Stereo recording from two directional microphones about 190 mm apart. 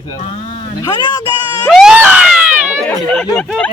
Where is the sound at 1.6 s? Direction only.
Centre (ahead or behind).